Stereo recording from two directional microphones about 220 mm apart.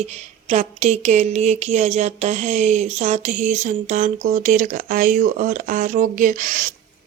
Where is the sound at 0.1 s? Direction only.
30° right (ahead or behind).